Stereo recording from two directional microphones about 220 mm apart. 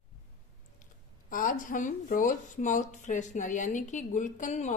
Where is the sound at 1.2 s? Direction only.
40° left (ahead or behind).